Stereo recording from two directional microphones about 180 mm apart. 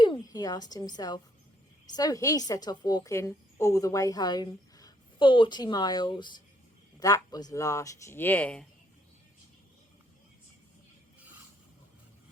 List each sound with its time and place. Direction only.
0.0 s a woman's voice: 25° left (ahead or behind); by 8.6 s 5° left (ahead or behind)